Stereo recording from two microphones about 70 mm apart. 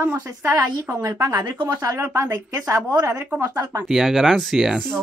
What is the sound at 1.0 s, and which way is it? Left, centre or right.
Speech, right.